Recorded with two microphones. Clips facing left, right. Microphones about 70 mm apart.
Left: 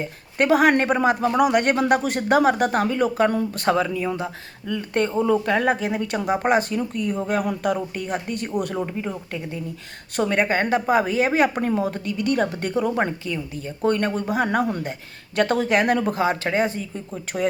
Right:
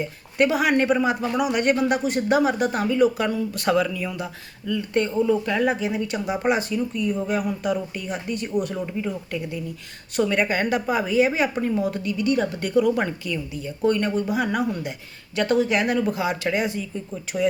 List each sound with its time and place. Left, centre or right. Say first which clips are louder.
0.0 s speech: right 1 dB; left
8.9 s a woman's voice: right 1 dB; left